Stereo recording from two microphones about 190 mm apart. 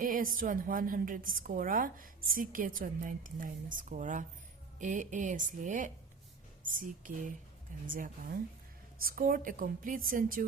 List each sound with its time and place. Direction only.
0.0 s a woman's voice: 45° right (ahead or behind)
7.9 s a woman's voice: 45° right (ahead or behind)